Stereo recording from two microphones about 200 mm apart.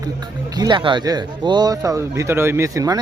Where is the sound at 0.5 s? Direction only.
20° right (ahead or behind).